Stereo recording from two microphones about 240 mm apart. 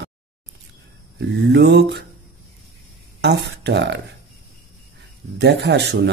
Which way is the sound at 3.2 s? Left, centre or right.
Right.